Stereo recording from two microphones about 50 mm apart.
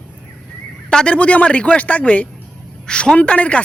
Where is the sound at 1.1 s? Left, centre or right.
Left.